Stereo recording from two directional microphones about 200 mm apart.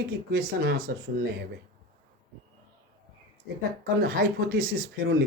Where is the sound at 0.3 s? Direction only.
50° right (ahead or behind).